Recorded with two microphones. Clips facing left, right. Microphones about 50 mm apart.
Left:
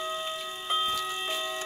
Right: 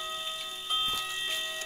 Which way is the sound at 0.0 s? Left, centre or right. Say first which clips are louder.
Left 4 dB; left.